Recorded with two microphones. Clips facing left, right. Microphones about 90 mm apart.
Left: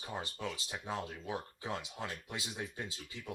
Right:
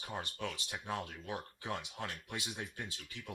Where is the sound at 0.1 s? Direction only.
15° left (ahead or behind).